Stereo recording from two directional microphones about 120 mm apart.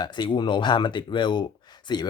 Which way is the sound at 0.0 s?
40° left (ahead or behind).